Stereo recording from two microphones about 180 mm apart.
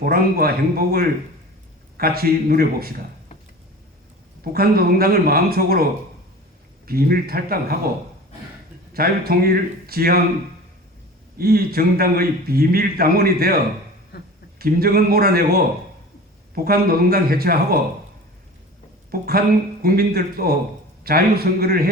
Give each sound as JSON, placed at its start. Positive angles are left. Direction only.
{"t": 0.0, "sound": "a man's voice", "side_deg": -55}
{"t": 4.5, "sound": "a man's voice", "side_deg": -55}
{"t": 8.9, "sound": "a man's voice", "side_deg": -55}
{"t": 11.3, "sound": "a man's voice", "side_deg": -55}
{"t": 14.6, "sound": "a man's voice", "side_deg": -55}
{"t": 19.1, "sound": "a man's voice", "side_deg": -55}